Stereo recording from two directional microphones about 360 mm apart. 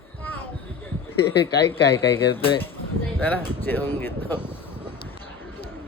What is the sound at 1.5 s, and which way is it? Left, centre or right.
Speech, left.